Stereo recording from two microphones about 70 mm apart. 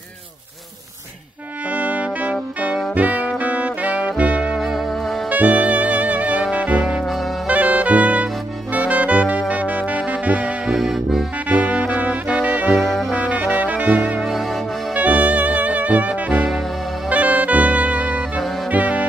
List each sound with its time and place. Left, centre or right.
1.7 s brass instrument: right
2.9 s saxophone: right
4.6 s music: centre
5.3 s saxophone: right
10.7 s accordion: centre
11.4 s music: right
13.1 s brass instrument: right
14.2 s music: centre
15.0 s saxophone: right
18.7 s music: right